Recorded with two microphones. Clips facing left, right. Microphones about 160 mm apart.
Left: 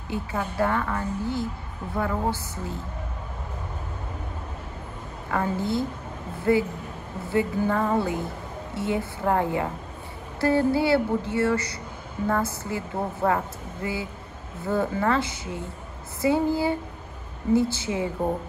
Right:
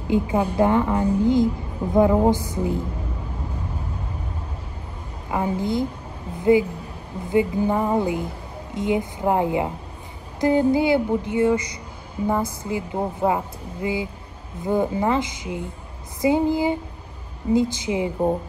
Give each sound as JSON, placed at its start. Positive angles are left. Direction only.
{"t": 0.1, "sound": "a woman's voice", "side_deg": -15}
{"t": 5.3, "sound": "a woman's voice", "side_deg": -15}